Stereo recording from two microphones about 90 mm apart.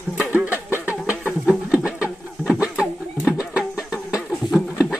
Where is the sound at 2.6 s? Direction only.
5° right (ahead or behind).